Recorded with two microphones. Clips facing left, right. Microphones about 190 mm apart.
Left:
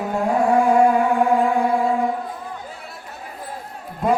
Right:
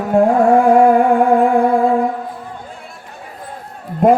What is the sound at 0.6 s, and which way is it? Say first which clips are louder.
Music: right 5 dB; 55° right (ahead or behind).